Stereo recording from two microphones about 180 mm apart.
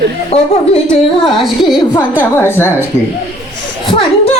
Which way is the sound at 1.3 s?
Centre (ahead or behind).